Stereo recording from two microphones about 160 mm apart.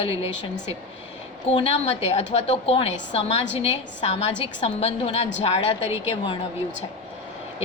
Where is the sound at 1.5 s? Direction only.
40° left (ahead or behind).